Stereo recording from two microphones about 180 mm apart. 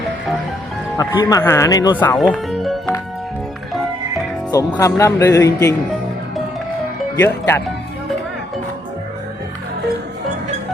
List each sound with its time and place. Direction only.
0.9 s speech: 20° left (ahead or behind)
2.0 s speech: 5° left (ahead or behind)
4.5 s speech: 20° left (ahead or behind)
7.2 s speech: 15° left (ahead or behind)